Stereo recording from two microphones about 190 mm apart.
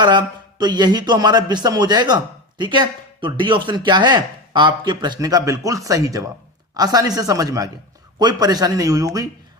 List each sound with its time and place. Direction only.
0.0 s speech: 20° right (ahead or behind)